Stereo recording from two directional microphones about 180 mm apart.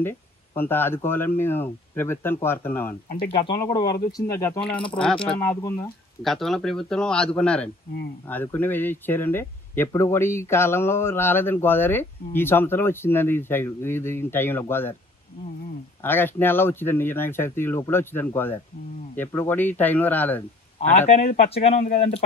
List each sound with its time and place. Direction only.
0.6 s speech: 10° left (ahead or behind)
3.3 s speech: 30° left (ahead or behind)
4.6 s speech: 5° left (ahead or behind)
6.2 s speech: centre (ahead or behind)
16.0 s speech: 10° left (ahead or behind)
21.7 s speech: 50° left (ahead or behind)